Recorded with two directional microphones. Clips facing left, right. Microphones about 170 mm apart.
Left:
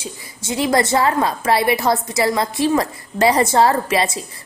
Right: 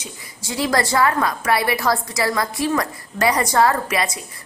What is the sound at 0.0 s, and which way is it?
A woman's voice, 20° left (ahead or behind).